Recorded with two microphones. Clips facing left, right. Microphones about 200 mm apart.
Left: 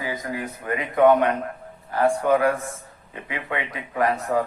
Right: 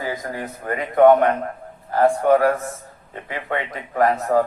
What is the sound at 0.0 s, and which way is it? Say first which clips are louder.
Speech: right 1 dB; 45° right (ahead or behind).